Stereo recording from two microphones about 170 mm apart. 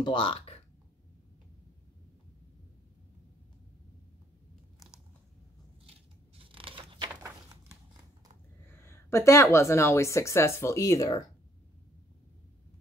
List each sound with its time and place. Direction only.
0.0 s speech: 30° left (ahead or behind)
6.3 s scissors: 30° right (ahead or behind)
8.6 s speech: 15° left (ahead or behind)